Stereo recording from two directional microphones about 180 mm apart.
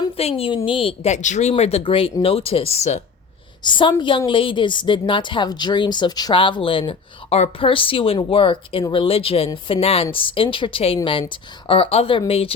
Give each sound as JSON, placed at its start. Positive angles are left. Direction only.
{"t": 0.0, "sound": "a woman's voice", "side_deg": 35}
{"t": 3.6, "sound": "a woman's voice", "side_deg": 25}